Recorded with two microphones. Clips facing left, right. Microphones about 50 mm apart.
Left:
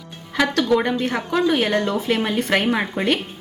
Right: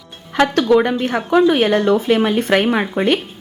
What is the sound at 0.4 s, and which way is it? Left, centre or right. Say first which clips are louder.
A woman's voice: right 5 dB; right.